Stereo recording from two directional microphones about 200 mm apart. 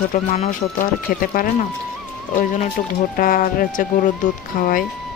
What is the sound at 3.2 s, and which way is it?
Speech, 45° left (ahead or behind).